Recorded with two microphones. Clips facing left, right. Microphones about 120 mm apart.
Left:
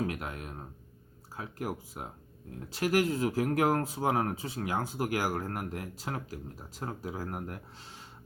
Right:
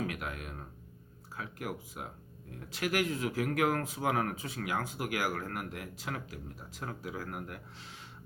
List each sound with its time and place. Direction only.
0.0 s music: 35° left (ahead or behind)
1.4 s speech: 35° left (ahead or behind)